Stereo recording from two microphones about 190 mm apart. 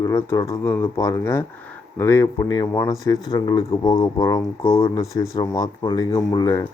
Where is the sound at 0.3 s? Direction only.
20° left (ahead or behind).